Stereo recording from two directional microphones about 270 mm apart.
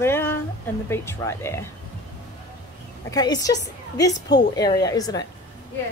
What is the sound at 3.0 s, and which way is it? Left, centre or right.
A woman's voice, centre.